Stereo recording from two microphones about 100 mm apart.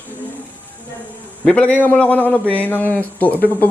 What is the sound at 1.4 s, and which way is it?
A man's voice, 15° left (ahead or behind).